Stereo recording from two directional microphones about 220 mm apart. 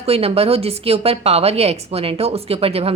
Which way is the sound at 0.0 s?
25° right (ahead or behind).